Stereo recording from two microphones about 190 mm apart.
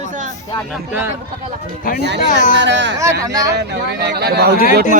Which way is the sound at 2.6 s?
70° right (ahead or behind).